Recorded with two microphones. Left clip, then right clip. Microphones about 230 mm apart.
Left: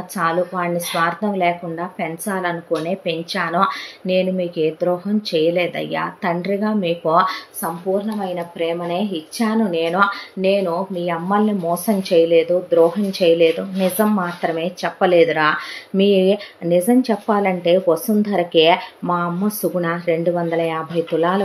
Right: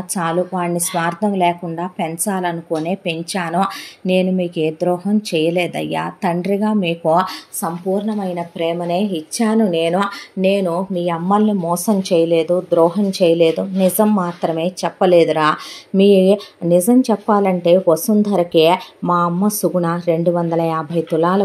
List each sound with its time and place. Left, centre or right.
0.1 s speech: right